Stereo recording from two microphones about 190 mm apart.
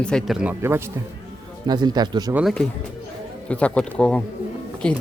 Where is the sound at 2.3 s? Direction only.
5° right (ahead or behind).